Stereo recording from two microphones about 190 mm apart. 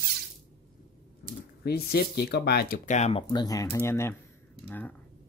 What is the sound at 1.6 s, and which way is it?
Speech, 55° left (ahead or behind).